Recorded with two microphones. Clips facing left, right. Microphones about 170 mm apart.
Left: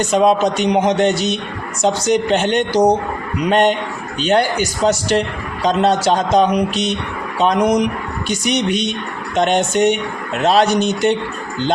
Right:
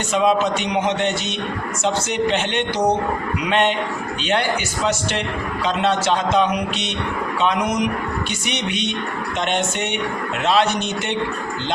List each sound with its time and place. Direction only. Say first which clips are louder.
0.1 s speech: left 2 dB; 40° left (ahead or behind)